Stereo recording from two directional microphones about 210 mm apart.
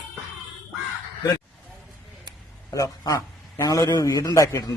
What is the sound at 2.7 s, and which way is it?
A man's voice, 15° left (ahead or behind).